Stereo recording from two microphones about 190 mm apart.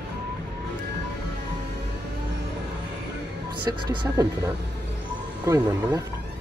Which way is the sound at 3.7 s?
20° right (ahead or behind).